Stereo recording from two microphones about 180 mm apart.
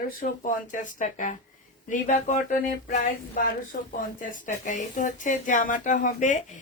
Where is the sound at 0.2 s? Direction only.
45° left (ahead or behind).